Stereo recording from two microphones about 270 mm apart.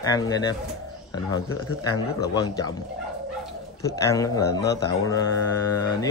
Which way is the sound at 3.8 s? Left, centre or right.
Centre.